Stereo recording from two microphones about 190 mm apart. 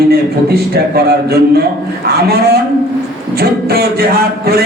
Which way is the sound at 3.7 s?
55° right (ahead or behind).